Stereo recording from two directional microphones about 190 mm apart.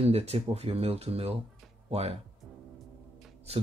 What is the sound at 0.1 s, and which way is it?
Speech, 30° right (ahead or behind).